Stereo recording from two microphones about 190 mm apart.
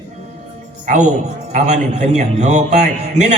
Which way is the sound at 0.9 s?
40° right (ahead or behind).